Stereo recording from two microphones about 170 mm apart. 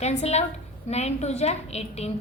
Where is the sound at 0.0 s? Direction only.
40° left (ahead or behind).